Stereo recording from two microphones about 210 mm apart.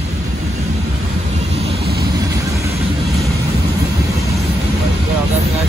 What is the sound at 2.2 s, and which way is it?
Vehicle, 15° right (ahead or behind).